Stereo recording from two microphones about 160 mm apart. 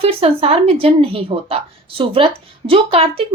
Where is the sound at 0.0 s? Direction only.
35° right (ahead or behind).